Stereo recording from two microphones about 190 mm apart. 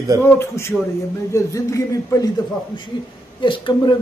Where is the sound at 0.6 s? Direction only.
15° left (ahead or behind).